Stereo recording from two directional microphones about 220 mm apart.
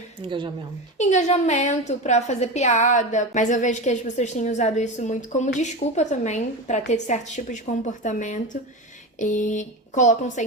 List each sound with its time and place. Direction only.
0.3 s speech: 20° right (ahead or behind)
0.9 s a woman's voice: 30° left (ahead or behind)